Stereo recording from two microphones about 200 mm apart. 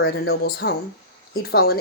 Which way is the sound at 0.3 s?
55° left (ahead or behind).